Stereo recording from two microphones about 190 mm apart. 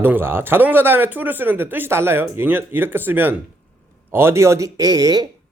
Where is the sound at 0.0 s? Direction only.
10° right (ahead or behind).